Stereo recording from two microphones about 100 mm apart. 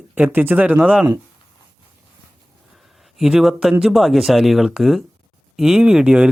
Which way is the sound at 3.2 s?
5° right (ahead or behind).